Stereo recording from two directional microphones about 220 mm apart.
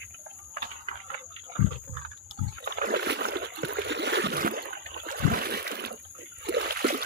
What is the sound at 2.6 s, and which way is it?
Rowboat, 45° right (ahead or behind).